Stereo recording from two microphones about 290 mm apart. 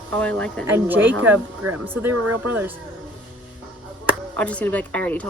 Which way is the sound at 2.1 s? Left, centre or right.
Right.